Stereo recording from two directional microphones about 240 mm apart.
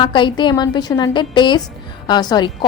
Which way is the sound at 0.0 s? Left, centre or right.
Centre.